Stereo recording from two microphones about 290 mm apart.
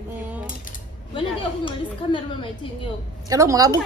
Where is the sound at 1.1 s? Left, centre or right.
Centre.